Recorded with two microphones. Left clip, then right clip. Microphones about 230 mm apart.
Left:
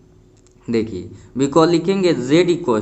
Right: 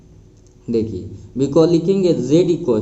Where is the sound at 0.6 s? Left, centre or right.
Left.